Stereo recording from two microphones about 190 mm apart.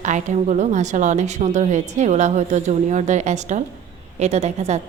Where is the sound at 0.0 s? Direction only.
40° right (ahead or behind).